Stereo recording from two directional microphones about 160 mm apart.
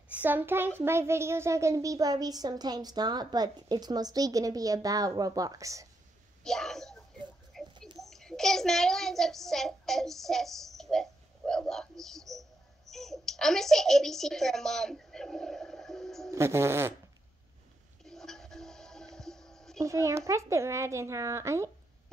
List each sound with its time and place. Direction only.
0.1 s a child's voice: 10° right (ahead or behind)
6.4 s a child's voice: 5° left (ahead or behind)
7.5 s a sound: centre (ahead or behind)
8.0 s a child's voice: centre (ahead or behind)
16.3 s a child's voice: 15° right (ahead or behind)
18.0 s music: 5° left (ahead or behind)
19.8 s a child's voice: 20° right (ahead or behind)